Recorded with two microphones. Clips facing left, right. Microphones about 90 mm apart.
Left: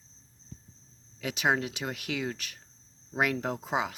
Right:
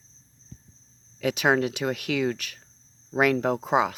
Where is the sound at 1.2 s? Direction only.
70° right (ahead or behind).